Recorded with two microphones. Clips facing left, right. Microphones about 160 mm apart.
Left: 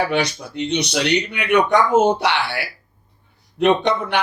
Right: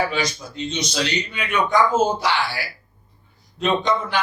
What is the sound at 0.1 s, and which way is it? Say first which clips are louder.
A man's voice: left 4 dB; 65° left (ahead or behind).